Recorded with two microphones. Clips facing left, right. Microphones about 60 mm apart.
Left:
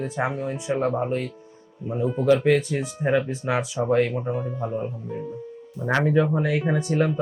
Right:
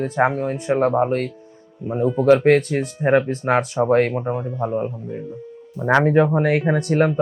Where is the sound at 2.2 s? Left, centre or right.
Right.